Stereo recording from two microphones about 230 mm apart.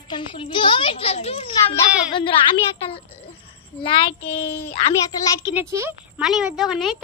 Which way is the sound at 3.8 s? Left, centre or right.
Left.